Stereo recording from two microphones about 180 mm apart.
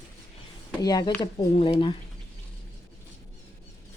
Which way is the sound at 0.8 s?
20° left (ahead or behind).